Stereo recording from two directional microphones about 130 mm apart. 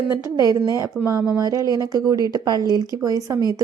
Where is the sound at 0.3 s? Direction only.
30° right (ahead or behind).